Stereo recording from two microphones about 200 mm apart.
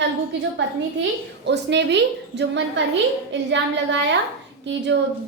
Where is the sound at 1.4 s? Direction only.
60° right (ahead or behind).